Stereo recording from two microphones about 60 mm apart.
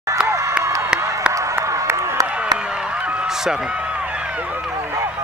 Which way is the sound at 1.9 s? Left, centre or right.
Right.